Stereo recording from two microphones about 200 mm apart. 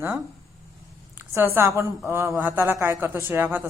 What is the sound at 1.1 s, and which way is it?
A woman's voice, 10° right (ahead or behind).